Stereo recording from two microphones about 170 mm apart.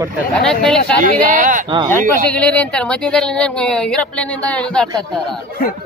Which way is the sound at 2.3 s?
5° left (ahead or behind).